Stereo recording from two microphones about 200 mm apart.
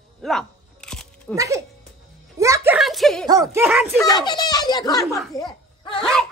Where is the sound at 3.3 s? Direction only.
15° right (ahead or behind).